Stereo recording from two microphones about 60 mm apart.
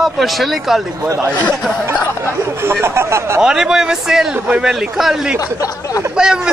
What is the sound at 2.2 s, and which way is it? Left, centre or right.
Speech, right.